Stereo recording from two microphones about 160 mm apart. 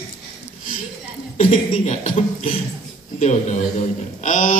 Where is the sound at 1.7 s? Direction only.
45° left (ahead or behind).